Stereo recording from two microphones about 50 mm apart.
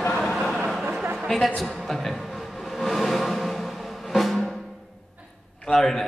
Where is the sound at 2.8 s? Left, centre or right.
Centre.